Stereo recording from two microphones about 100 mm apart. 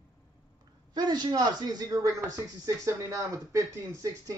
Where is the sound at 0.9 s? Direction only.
45° right (ahead or behind).